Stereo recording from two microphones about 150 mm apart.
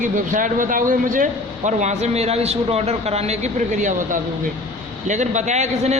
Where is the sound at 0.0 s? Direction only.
60° right (ahead or behind).